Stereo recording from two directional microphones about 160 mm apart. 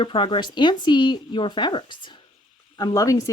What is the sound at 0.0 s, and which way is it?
Speech, 35° left (ahead or behind).